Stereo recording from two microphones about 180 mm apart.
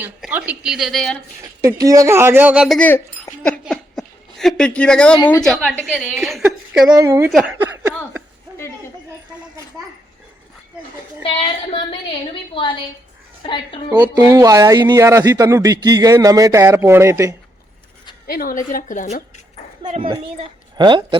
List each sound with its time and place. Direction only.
0.0 s a woman's voice: 10° right (ahead or behind)
1.4 s speech: 20° right (ahead or behind)
2.7 s speech: 10° left (ahead or behind)
3.6 s a sound: centre (ahead or behind)
5.3 s a woman's voice: centre (ahead or behind)
7.0 s speech: 15° right (ahead or behind)
7.3 s a woman's voice: centre (ahead or behind)
11.2 s a woman's voice: 30° left (ahead or behind)
13.9 s speech: 20° right (ahead or behind)
18.3 s a woman's voice: 55° left (ahead or behind)
19.9 s a woman's voice: 25° right (ahead or behind)